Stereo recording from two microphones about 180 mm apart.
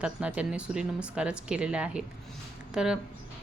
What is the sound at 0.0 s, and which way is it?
A woman's voice, 5° right (ahead or behind).